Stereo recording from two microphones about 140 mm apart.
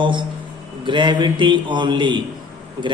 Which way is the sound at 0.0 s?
35° right (ahead or behind).